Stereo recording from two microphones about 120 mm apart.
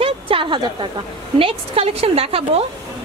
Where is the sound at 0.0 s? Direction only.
45° right (ahead or behind).